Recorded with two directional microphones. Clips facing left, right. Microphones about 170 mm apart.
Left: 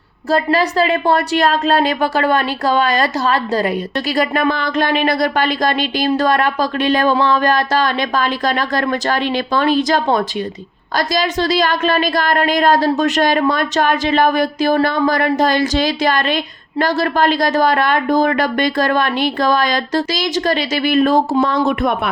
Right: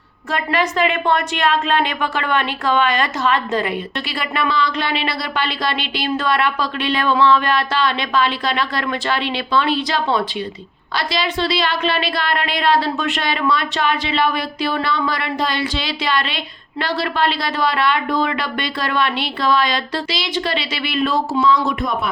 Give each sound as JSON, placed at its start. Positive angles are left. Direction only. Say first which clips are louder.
{"t": 0.3, "sound": "a woman's voice", "louder": "left 5 dB", "side_deg": 35}